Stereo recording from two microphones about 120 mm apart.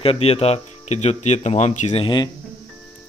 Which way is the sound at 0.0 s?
55° left (ahead or behind).